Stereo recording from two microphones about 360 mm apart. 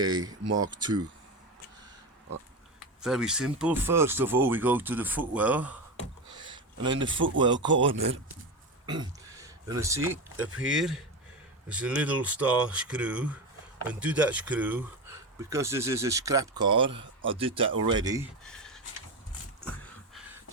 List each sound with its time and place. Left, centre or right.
0.0 s speech: centre
0.4 s speech: right
0.7 s speech: centre
3.0 s speech: centre
6.3 s a sound: centre
6.8 s speech: centre
7.7 s speech: right
8.9 s speech: centre
18.4 s a sound: centre